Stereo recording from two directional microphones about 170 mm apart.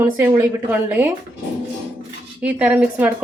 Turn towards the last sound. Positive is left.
turn(degrees=-10)  # may be behind; listen again after turning